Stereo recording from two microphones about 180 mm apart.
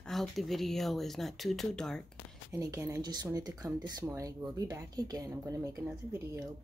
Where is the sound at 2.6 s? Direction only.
20° right (ahead or behind).